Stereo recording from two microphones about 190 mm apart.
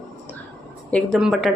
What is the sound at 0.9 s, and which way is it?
Speech, centre (ahead or behind).